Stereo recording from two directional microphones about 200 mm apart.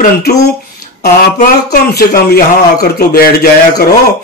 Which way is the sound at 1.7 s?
50° left (ahead or behind).